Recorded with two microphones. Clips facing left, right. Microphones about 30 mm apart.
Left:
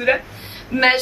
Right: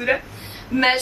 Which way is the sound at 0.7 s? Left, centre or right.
Left.